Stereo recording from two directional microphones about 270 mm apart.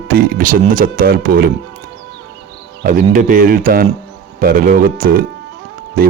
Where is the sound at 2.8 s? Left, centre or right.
Right.